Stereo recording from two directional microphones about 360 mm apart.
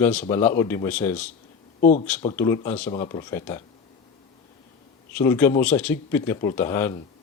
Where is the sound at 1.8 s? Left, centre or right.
Left.